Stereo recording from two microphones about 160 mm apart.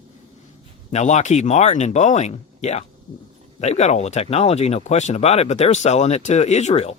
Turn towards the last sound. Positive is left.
turn(degrees=40)  # may be behind; listen again after turning